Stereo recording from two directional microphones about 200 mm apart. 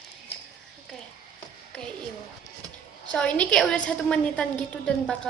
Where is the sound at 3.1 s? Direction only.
5° left (ahead or behind).